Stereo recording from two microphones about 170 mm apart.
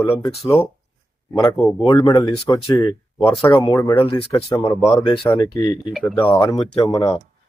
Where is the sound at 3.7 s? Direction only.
15° left (ahead or behind).